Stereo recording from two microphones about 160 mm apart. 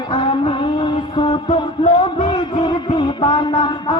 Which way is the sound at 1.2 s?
35° left (ahead or behind).